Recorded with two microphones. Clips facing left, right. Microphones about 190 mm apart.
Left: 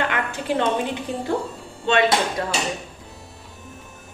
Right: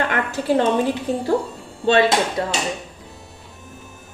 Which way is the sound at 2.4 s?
25° right (ahead or behind).